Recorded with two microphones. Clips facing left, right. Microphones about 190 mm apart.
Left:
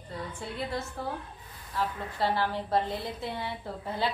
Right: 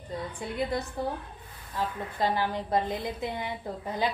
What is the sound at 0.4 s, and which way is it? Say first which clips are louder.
Speech: right 4 dB; 15° right (ahead or behind).